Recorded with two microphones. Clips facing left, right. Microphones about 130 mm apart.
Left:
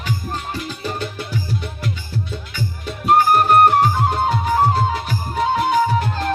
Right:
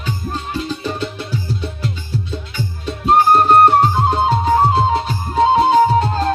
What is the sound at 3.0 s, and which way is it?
Music, 30° right (ahead or behind).